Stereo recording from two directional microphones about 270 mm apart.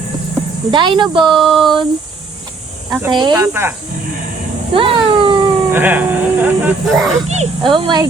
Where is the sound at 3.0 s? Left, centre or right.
Centre.